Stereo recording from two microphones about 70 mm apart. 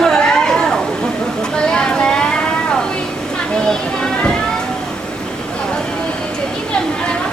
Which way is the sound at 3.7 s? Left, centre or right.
Centre.